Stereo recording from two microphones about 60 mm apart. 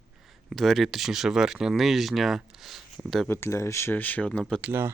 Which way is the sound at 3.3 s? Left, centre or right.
Left.